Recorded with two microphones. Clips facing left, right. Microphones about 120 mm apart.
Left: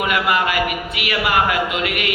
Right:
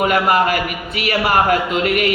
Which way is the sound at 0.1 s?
40° right (ahead or behind).